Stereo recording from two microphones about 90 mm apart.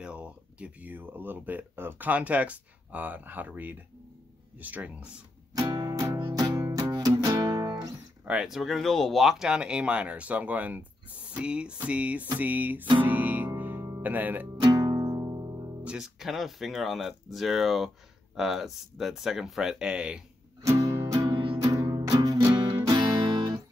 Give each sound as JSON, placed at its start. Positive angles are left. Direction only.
{"t": 0.0, "sound": "speech", "side_deg": -10}
{"t": 5.5, "sound": "music", "side_deg": -45}
{"t": 8.3, "sound": "speech", "side_deg": -5}
{"t": 13.0, "sound": "music", "side_deg": -20}
{"t": 14.0, "sound": "speech", "side_deg": -20}
{"t": 14.6, "sound": "music", "side_deg": -45}
{"t": 15.8, "sound": "speech", "side_deg": -10}
{"t": 20.6, "sound": "music", "side_deg": -40}